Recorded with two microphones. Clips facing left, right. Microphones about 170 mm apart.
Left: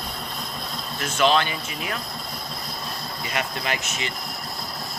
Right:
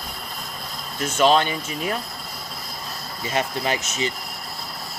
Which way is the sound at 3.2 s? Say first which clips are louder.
Right 5 dB; 35° right (ahead or behind).